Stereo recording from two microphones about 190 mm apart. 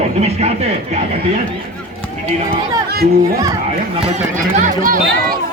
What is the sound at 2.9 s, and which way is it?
Speech, 55° right (ahead or behind).